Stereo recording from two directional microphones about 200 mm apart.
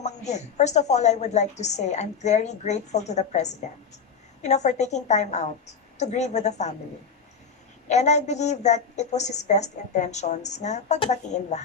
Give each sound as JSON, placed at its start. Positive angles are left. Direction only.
{"t": 0.0, "sound": "a woman's voice", "side_deg": 35}
{"t": 7.9, "sound": "a woman's voice", "side_deg": 35}